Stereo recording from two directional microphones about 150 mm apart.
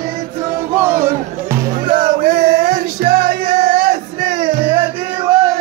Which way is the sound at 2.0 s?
75° right (ahead or behind).